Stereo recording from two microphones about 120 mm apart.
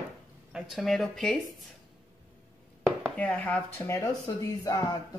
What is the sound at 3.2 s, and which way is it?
Speech, 10° left (ahead or behind).